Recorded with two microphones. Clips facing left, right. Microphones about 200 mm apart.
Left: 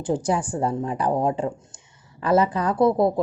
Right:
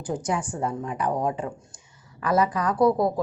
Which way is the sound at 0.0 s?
30° left (ahead or behind).